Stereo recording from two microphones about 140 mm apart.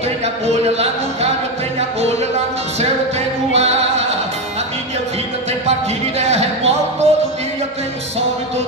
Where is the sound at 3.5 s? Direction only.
50° right (ahead or behind).